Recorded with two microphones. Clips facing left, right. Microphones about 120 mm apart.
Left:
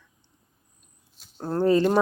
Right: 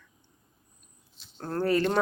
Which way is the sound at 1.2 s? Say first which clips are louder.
Left 1 dB; 45° left (ahead or behind).